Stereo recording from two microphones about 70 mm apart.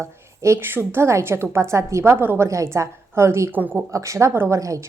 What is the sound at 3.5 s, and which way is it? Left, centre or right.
Speech, right.